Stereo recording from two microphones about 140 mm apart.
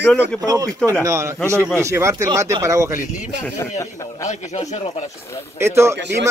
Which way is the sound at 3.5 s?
20° left (ahead or behind).